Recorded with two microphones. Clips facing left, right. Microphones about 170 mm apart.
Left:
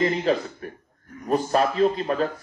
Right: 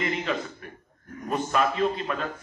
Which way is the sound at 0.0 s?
35° left (ahead or behind).